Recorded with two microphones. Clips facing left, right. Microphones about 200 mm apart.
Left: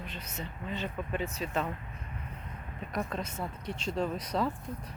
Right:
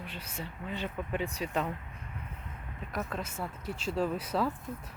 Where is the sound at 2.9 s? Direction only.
5° right (ahead or behind).